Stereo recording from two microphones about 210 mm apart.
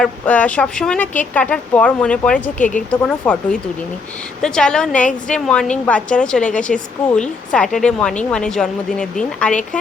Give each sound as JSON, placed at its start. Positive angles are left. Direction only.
{"t": 0.0, "sound": "speech", "side_deg": 5}
{"t": 2.6, "sound": "a woman's voice", "side_deg": 40}
{"t": 2.9, "sound": "a woman's voice", "side_deg": 5}